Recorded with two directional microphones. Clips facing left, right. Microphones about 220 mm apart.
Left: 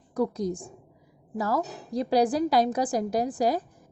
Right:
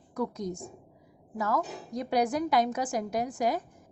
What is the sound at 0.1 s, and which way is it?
A woman's voice, 35° left (ahead or behind).